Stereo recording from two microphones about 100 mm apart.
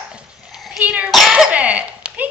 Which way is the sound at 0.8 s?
15° right (ahead or behind).